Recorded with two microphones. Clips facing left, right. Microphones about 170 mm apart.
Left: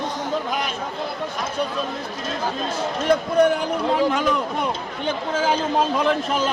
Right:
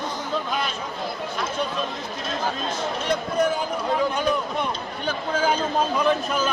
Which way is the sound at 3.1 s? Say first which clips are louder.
Left 6 dB; 65° left (ahead or behind).